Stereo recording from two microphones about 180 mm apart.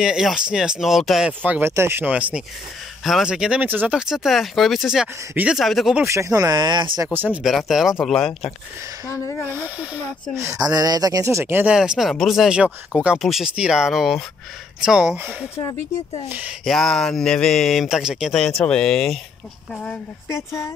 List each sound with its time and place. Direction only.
0.0 s speech: 5° right (ahead or behind)
6.0 s speech: 15° right (ahead or behind)
7.2 s speech: centre (ahead or behind)
9.1 s speech: 15° left (ahead or behind)
9.5 s speech: 10° right (ahead or behind)
15.6 s speech: 30° left (ahead or behind)
16.3 s speech: 5° right (ahead or behind); by 20.7 s 15° left (ahead or behind)